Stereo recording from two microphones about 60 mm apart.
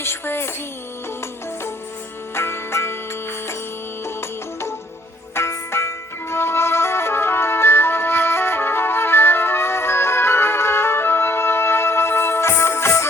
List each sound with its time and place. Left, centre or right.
0.0 s speech: left
2.3 s music: left
4.0 s music: left